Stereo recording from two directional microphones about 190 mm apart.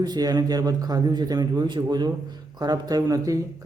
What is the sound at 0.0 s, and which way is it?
A man's voice, 20° right (ahead or behind).